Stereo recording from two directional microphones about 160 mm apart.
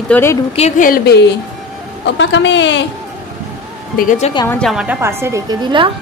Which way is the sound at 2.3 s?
90° left.